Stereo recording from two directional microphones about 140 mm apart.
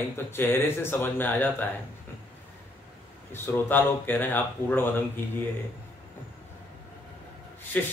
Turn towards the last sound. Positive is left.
turn(degrees=10)  # may be behind; listen again after turning